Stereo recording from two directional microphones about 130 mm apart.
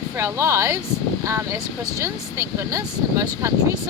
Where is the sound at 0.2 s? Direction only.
20° right (ahead or behind).